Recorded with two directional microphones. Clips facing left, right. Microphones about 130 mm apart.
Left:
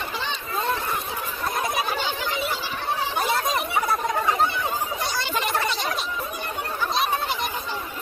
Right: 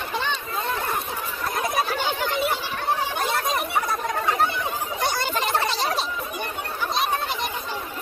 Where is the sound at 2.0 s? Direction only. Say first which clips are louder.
Right 3 dB; 55° right (ahead or behind).